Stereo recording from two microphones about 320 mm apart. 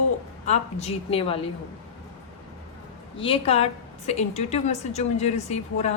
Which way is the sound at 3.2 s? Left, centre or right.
Centre.